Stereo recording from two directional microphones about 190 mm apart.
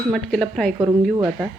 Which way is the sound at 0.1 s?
Centre (ahead or behind).